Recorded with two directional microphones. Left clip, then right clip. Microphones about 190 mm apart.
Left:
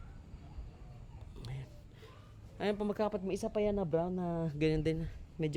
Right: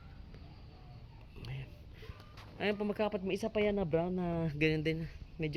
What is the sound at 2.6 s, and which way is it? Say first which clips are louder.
A woman's voice: even; centre (ahead or behind).